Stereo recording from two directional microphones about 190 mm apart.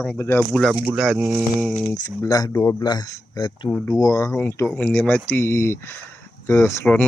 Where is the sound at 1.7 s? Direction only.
10° left (ahead or behind).